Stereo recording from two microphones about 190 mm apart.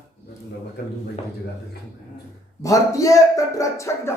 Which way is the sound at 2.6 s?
15° left (ahead or behind).